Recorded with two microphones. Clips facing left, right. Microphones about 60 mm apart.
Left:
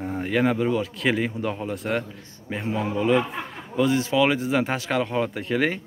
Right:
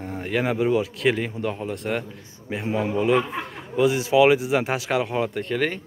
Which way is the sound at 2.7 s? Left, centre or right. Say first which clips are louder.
Right 1 dB; centre.